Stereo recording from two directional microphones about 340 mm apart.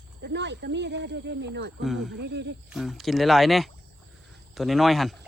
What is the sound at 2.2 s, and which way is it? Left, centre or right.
Speech, right.